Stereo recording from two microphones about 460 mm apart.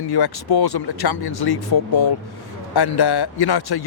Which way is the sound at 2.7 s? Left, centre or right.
Left.